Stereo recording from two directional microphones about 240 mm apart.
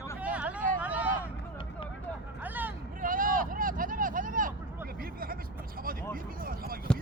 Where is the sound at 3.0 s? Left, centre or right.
Right.